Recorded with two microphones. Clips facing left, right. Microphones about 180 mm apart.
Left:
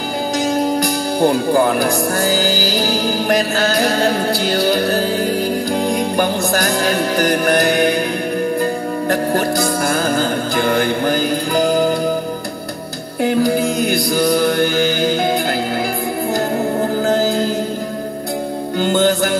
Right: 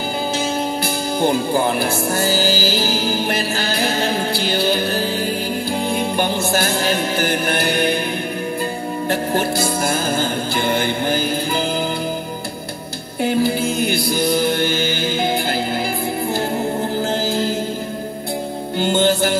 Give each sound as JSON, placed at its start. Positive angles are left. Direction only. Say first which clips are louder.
{"t": 1.2, "sound": "speech", "louder": "left 4 dB", "side_deg": 50}
{"t": 5.7, "sound": "music", "louder": "left 3 dB", "side_deg": 40}
{"t": 10.7, "sound": "music", "louder": "left 3 dB", "side_deg": 45}
{"t": 13.4, "sound": "music", "louder": "left 3 dB", "side_deg": 40}